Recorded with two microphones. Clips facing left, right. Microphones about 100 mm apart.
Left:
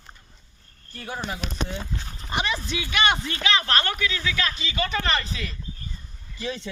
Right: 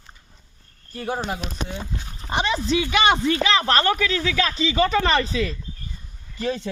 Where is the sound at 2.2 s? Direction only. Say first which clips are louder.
Right 4 dB; 30° right (ahead or behind).